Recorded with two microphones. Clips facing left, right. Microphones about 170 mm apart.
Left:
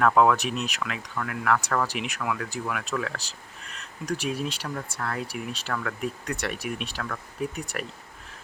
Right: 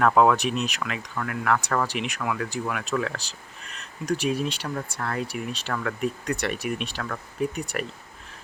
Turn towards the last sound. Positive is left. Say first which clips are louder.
# right 3 dB
turn(degrees=0)  # may be behind; listen again after turning